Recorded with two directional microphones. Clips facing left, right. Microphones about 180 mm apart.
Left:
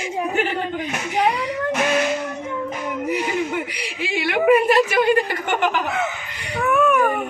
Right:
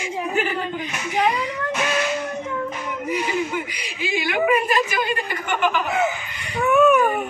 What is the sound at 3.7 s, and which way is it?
Speech, 70° left (ahead or behind).